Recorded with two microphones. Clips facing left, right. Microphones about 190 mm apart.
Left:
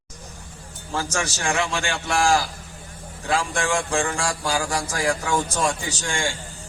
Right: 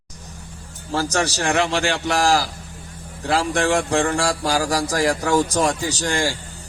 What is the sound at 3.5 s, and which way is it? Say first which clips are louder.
Speech: right 5 dB; 65° right (ahead or behind).